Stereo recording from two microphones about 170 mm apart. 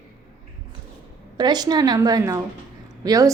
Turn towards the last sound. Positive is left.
turn(degrees=-20)  # may be behind; listen again after turning